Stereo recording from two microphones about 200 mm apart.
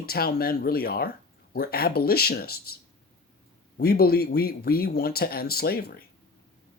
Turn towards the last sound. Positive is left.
turn(degrees=50)  # may be behind; listen again after turning